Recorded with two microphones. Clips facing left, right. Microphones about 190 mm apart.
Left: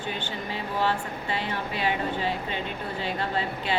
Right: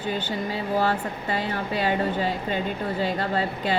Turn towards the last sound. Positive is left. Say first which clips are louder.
# right 3 dB
turn(degrees=-40)  # may be behind; listen again after turning